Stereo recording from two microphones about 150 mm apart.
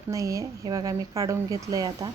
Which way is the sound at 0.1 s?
20° right (ahead or behind).